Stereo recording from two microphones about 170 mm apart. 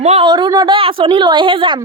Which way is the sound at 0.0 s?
40° right (ahead or behind).